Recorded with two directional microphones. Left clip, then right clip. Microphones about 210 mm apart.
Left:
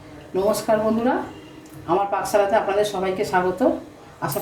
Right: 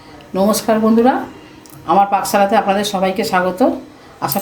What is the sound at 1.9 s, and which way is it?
Speech, 50° right (ahead or behind).